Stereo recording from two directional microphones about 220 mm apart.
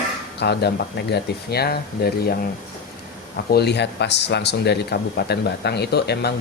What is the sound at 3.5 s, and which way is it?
Speech, 50° left (ahead or behind).